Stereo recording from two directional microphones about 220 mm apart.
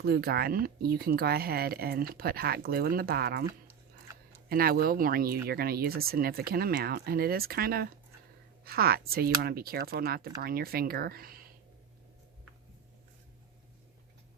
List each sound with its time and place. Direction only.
0.0 s speech: 45° right (ahead or behind)
4.4 s speech: 40° right (ahead or behind)